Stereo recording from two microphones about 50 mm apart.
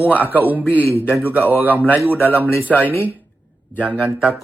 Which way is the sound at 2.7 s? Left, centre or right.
Left.